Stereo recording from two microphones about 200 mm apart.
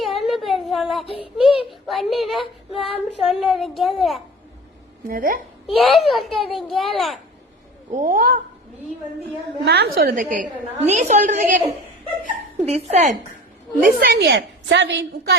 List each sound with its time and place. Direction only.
0.0 s a sound: centre (ahead or behind)
1.0 s child singing: 30° left (ahead or behind)
1.9 s speech: centre (ahead or behind)
5.0 s a woman's voice: 45° right (ahead or behind)
5.6 s speech: centre (ahead or behind)
7.9 s a woman's voice: 40° right (ahead or behind)
9.6 s a woman's voice: 55° right (ahead or behind); by 13.1 s 35° right (ahead or behind)
13.8 s a woman's voice: 45° right (ahead or behind)